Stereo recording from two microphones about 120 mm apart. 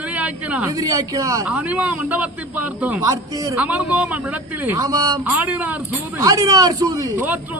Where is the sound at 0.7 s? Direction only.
30° right (ahead or behind).